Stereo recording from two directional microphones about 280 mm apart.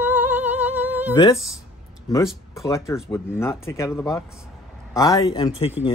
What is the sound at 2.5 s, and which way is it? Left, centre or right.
Speech, centre.